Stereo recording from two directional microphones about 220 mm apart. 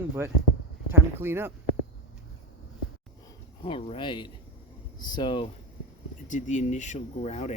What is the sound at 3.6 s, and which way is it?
Speech, 25° left (ahead or behind).